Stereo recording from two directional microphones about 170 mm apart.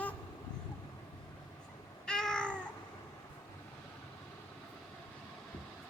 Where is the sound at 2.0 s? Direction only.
5° left (ahead or behind).